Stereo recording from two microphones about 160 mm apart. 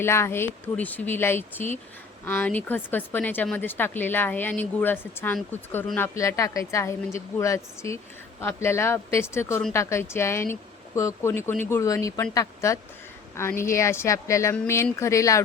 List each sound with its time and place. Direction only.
0.0 s a woman's voice: 15° left (ahead or behind)